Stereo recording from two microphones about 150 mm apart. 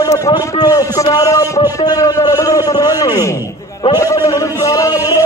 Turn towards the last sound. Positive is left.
turn(degrees=20)  # may be behind; listen again after turning